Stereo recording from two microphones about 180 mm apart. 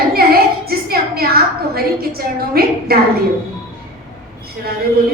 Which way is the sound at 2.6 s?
60° right (ahead or behind).